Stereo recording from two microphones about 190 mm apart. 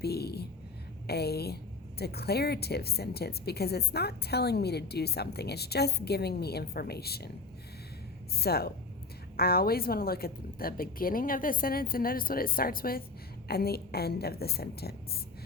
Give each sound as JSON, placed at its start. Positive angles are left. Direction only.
{"t": 0.0, "sound": "a woman's voice", "side_deg": 55}
{"t": 8.4, "sound": "a woman's voice", "side_deg": 55}